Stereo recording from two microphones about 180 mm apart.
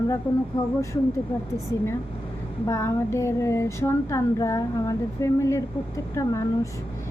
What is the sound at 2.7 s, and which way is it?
Speech, 15° left (ahead or behind).